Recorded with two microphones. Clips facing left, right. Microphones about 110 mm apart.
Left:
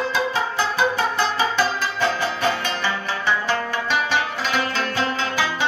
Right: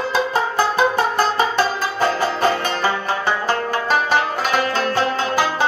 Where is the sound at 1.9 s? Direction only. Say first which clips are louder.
Right 6 dB; 45° right (ahead or behind).